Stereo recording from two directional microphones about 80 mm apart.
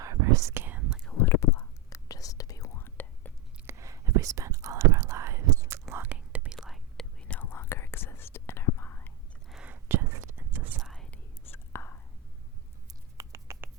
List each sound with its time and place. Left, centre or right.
0.0 s whispering: right
1.2 s whispering: left
2.7 s whispering: left
3.7 s whispering: right
5.9 s whispering: right
6.6 s whispering: centre
7.3 s whispering: left
9.6 s whispering: right
10.8 s whispering: centre
11.1 s whispering: left
12.9 s a sound: right